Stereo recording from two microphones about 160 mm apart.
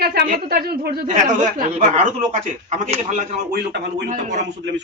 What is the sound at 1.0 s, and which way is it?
Speech, 45° right (ahead or behind).